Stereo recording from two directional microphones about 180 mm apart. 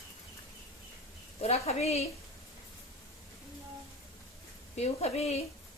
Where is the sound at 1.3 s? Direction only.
35° left (ahead or behind).